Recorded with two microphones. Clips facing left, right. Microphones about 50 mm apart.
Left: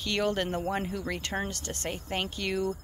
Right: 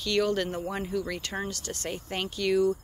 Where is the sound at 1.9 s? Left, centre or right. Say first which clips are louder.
Even; centre.